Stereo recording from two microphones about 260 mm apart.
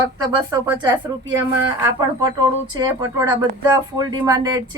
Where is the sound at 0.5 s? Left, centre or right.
Centre.